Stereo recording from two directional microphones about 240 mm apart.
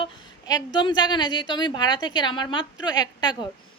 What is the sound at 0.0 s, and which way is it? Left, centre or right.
A woman's voice, centre.